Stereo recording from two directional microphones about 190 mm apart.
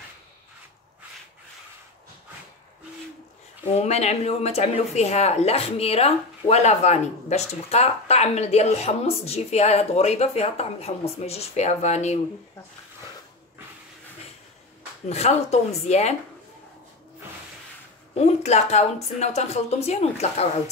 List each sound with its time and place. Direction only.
3.6 s speech: 35° left (ahead or behind)
15.0 s speech: 35° left (ahead or behind)
18.1 s speech: 35° left (ahead or behind)